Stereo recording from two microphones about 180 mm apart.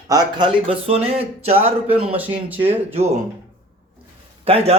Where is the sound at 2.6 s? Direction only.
35° right (ahead or behind).